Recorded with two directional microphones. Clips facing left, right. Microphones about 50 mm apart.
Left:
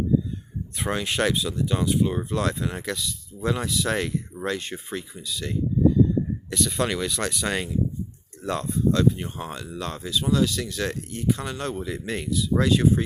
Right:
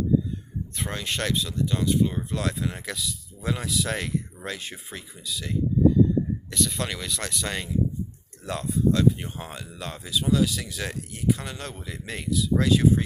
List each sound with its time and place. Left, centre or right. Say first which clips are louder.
0.9 s speech: left 5 dB; centre
2.3 s speech: left 3 dB; centre